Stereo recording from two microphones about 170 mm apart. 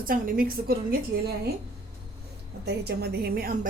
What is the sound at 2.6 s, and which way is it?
Speech, 75° right (ahead or behind).